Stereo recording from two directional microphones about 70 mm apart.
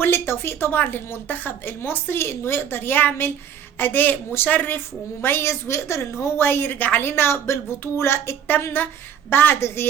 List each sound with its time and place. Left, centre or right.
0.0 s a woman's voice: left